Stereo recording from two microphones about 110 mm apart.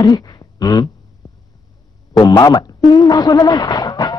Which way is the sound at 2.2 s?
35° left (ahead or behind).